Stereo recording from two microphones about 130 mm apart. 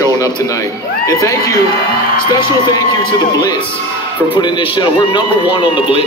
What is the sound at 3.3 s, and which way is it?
A man's voice, 35° left (ahead or behind).